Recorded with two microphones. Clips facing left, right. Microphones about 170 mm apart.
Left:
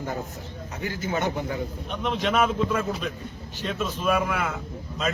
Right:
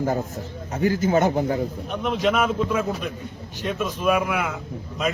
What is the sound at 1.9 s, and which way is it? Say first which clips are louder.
A man's voice: right 3 dB; 5° right (ahead or behind).